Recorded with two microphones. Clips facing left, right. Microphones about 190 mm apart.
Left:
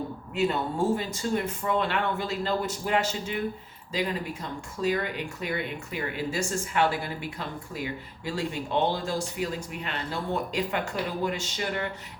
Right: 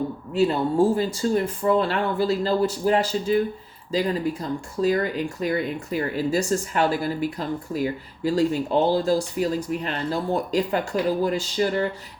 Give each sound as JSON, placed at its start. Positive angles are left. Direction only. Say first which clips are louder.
{"t": 0.3, "sound": "speech", "louder": "right 7 dB", "side_deg": -35}